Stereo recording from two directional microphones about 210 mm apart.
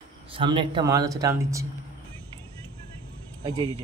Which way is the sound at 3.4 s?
25° right (ahead or behind).